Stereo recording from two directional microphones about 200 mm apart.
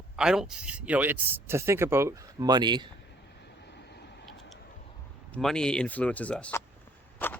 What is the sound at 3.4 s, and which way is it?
Vehicle, 55° left (ahead or behind).